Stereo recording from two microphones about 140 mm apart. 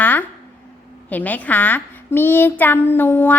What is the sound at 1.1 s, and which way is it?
A child's voice, 10° left (ahead or behind).